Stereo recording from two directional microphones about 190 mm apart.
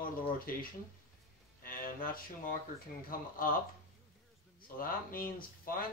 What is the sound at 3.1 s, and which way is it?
Speech, 50° left (ahead or behind).